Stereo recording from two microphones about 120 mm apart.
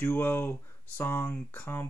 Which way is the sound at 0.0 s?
15° left (ahead or behind).